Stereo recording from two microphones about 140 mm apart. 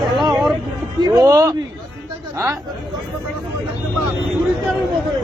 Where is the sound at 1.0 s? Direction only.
25° right (ahead or behind).